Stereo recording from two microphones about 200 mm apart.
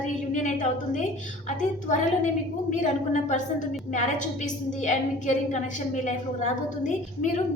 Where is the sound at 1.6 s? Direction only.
35° left (ahead or behind).